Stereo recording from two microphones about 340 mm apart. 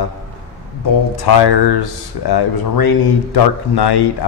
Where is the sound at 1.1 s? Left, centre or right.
Left.